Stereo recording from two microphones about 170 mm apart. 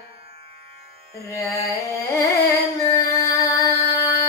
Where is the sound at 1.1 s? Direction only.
20° left (ahead or behind).